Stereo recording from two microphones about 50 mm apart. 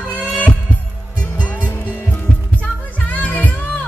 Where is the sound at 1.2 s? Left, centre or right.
Left.